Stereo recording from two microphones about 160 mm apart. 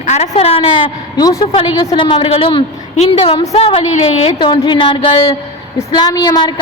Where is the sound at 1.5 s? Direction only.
35° left (ahead or behind).